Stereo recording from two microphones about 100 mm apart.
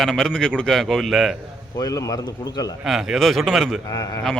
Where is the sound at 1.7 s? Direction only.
35° left (ahead or behind).